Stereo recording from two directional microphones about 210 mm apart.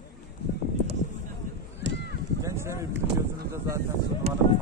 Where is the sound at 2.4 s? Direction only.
15° right (ahead or behind).